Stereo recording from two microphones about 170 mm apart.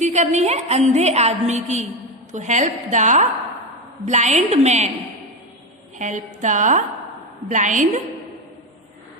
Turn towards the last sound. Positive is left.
turn(degrees=-50)  # may be behind; listen again after turning